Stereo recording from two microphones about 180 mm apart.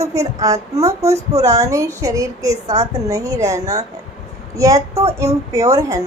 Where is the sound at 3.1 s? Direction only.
20° right (ahead or behind).